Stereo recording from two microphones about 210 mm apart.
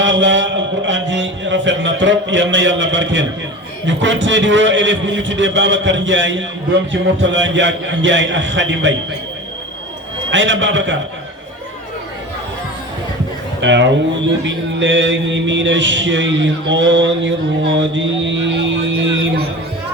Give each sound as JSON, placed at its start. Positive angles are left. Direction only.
{"t": 0.0, "sound": "speech", "side_deg": -60}
{"t": 10.3, "sound": "speech", "side_deg": -60}
{"t": 13.6, "sound": "speech", "side_deg": -60}